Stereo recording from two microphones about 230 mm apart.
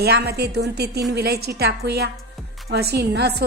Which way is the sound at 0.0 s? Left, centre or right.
Right.